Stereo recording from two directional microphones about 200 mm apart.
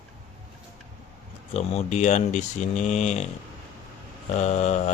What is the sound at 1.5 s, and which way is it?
Speech, 30° left (ahead or behind).